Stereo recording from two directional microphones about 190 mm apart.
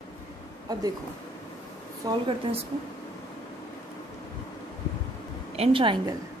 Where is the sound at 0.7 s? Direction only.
20° right (ahead or behind).